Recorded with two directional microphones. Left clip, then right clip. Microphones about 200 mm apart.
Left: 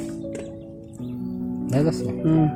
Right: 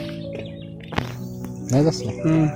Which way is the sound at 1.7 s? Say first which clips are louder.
Right 3 dB; 30° right (ahead or behind).